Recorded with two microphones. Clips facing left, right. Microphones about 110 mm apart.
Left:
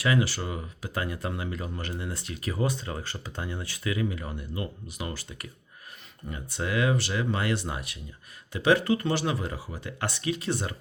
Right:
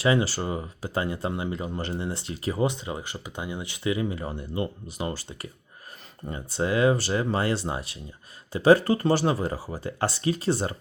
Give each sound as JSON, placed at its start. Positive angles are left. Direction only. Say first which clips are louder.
{"t": 0.0, "sound": "speech", "louder": "right 3 dB", "side_deg": -30}